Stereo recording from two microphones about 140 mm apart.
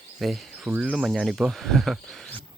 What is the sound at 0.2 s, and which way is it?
Speech, centre (ahead or behind).